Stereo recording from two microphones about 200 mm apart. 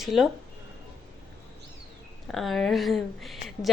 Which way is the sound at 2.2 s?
Centre (ahead or behind).